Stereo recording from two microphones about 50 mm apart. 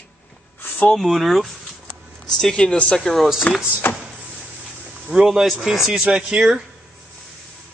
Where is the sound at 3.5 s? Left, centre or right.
Centre.